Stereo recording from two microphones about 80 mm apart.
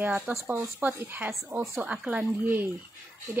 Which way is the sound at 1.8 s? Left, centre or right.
Centre.